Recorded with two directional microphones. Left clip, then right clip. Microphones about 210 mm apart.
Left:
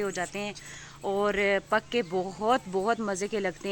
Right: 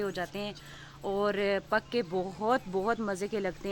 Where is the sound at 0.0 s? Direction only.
15° left (ahead or behind).